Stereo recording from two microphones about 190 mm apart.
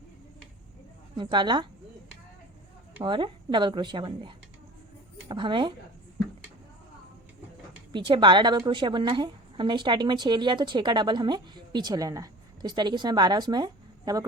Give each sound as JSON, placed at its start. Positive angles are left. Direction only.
{"t": 1.1, "sound": "a woman's voice", "side_deg": -25}
{"t": 3.0, "sound": "a woman's voice", "side_deg": -25}
{"t": 7.9, "sound": "a woman's voice", "side_deg": -25}